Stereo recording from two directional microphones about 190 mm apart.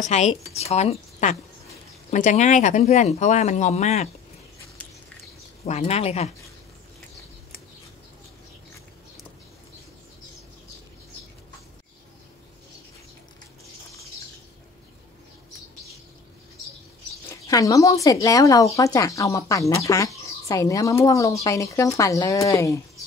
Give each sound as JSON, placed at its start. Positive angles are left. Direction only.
{"t": 0.1, "sound": "speech", "side_deg": 35}
{"t": 5.7, "sound": "speech", "side_deg": 35}
{"t": 17.3, "sound": "speech", "side_deg": 20}